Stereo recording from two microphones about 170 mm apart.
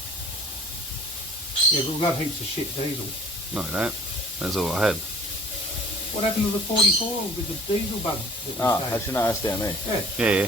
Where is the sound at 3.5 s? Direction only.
5° right (ahead or behind).